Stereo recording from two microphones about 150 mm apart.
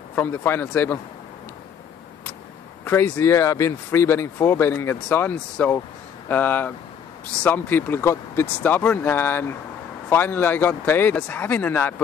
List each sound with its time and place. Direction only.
0.1 s speech: 15° left (ahead or behind)
2.8 s speech: 15° left (ahead or behind)